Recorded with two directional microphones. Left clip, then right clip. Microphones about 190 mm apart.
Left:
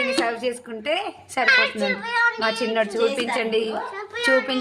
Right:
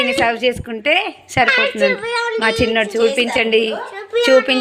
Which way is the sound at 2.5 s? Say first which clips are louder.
Right 6 dB; 20° right (ahead or behind).